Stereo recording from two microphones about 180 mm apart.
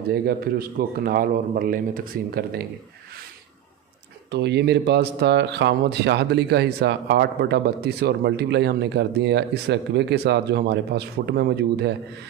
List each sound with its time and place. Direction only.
0.1 s speech: 55° right (ahead or behind)
4.3 s speech: 70° right (ahead or behind)